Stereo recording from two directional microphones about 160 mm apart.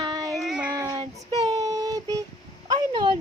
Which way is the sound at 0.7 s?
20° right (ahead or behind).